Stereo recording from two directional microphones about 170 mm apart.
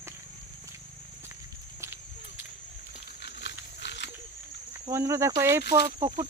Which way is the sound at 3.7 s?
90° left.